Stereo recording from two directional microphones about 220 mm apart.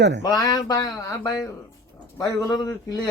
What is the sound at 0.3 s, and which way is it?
A man's voice, 15° left (ahead or behind).